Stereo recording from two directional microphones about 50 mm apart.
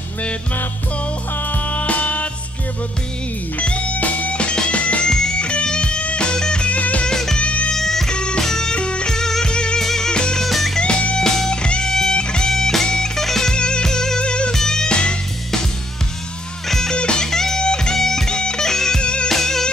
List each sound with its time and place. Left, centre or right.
1.5 s music: left
3.5 s music: left
6.8 s music: left
7.1 s music: centre
7.3 s music: left
7.7 s music: centre
10.4 s music: centre
10.8 s music: left
11.1 s music: centre
16.6 s music: centre
16.9 s music: centre
19.2 s music: centre